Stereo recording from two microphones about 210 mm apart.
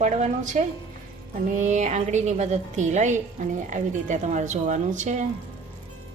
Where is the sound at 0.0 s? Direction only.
35° right (ahead or behind).